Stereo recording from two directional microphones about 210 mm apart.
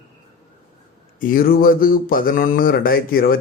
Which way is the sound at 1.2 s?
45° left (ahead or behind).